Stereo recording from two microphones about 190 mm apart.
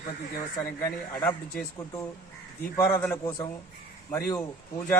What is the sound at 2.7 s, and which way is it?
A man's voice, 15° left (ahead or behind).